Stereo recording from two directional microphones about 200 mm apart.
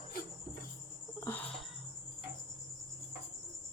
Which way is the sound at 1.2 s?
10° left (ahead or behind).